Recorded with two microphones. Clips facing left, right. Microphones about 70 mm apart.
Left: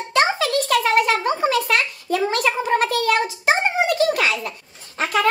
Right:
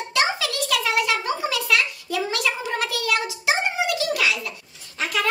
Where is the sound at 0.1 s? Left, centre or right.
Left.